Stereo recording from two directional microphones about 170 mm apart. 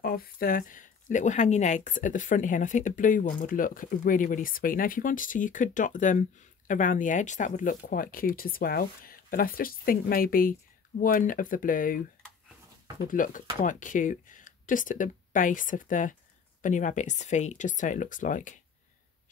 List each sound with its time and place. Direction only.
0.0 s speech: 60° left (ahead or behind)
13.1 s speech: 50° left (ahead or behind)